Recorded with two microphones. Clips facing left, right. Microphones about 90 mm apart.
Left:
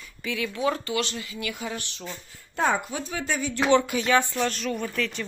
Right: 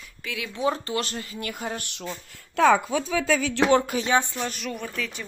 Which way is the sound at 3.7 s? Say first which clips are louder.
Left 2 dB; 40° right (ahead or behind).